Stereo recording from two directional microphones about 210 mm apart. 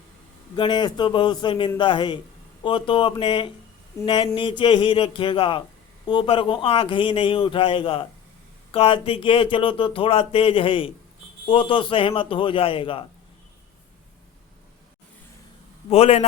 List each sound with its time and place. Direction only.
0.5 s speech: 20° left (ahead or behind)
15.9 s a man's voice: 30° left (ahead or behind)